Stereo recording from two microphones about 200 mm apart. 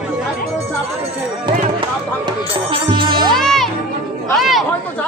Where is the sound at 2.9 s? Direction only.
25° right (ahead or behind).